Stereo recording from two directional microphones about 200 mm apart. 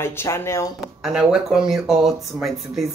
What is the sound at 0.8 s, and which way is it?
Speech, 5° right (ahead or behind).